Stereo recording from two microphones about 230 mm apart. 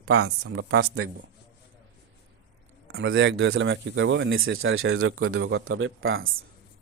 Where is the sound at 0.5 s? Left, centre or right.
Right.